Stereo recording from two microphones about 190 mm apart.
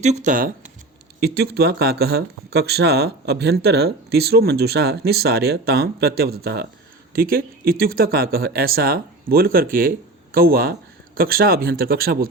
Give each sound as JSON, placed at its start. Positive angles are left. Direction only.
{"t": 0.0, "sound": "speech", "side_deg": -40}
{"t": 1.2, "sound": "speech", "side_deg": -55}